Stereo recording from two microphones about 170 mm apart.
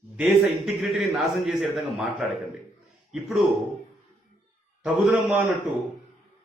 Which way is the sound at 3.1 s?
Centre (ahead or behind).